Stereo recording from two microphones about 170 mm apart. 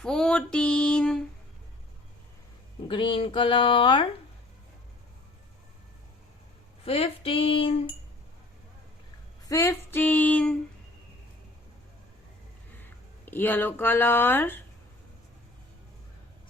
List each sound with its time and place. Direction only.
0.0 s a sound: 5° left (ahead or behind)
2.8 s speech: 30° left (ahead or behind)
6.8 s female singing: 35° left (ahead or behind)
9.5 s speech: 15° left (ahead or behind)
13.2 s speech: 10° left (ahead or behind)